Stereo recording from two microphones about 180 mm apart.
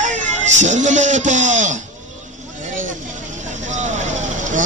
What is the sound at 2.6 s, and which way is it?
Vehicle, 45° right (ahead or behind).